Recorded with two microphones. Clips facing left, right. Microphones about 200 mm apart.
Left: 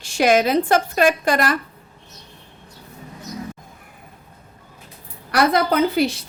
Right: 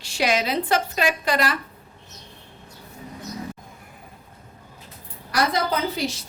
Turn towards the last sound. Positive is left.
turn(degrees=60)  # may be behind; listen again after turning